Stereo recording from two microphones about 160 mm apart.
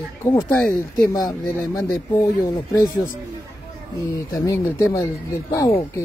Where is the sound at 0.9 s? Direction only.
25° left (ahead or behind).